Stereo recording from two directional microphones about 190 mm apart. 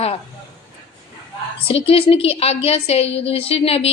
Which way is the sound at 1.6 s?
30° left (ahead or behind).